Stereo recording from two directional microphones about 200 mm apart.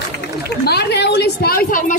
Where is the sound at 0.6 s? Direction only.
55° left (ahead or behind).